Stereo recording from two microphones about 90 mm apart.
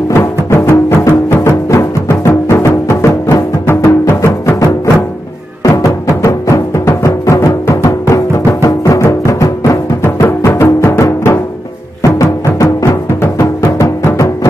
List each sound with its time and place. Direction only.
0.1 s music: 25° left (ahead or behind)
10.2 s music: 30° left (ahead or behind)
12.0 s music: 40° left (ahead or behind)